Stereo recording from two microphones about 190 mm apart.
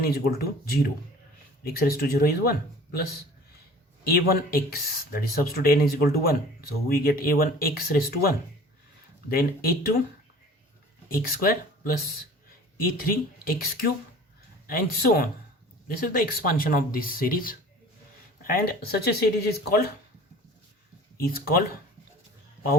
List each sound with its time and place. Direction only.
0.0 s speech: 55° left (ahead or behind)
11.1 s speech: 50° left (ahead or behind)
21.2 s speech: 50° left (ahead or behind)